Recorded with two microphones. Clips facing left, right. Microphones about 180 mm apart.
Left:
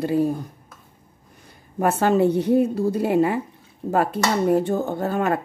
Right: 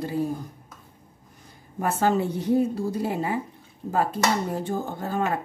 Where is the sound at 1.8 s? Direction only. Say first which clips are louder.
Left 5 dB; 70° left (ahead or behind).